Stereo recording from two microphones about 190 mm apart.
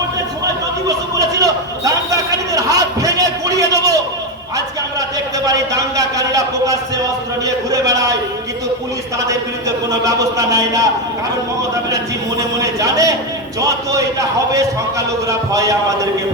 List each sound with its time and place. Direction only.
0.4 s a sound: 20° right (ahead or behind)
5.5 s a man's voice: 20° right (ahead or behind)
10.0 s speech: 20° right (ahead or behind)
12.4 s speech: 15° right (ahead or behind)